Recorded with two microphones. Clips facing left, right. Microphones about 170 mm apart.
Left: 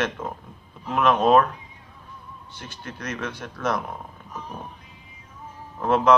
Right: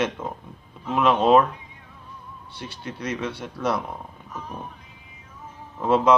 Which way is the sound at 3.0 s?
10° right (ahead or behind).